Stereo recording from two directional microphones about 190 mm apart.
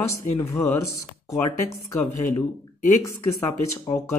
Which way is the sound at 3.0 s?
15° left (ahead or behind).